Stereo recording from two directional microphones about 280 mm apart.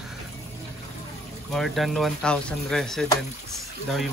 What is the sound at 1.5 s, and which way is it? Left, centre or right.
Speech, centre.